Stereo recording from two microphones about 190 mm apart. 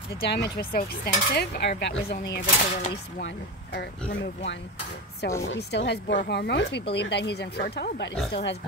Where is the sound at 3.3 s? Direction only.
65° left (ahead or behind).